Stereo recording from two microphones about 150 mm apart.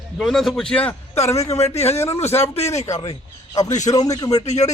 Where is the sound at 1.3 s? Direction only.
45° left (ahead or behind).